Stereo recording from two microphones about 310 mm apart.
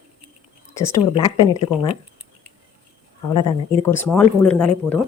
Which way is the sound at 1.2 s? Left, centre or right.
Centre.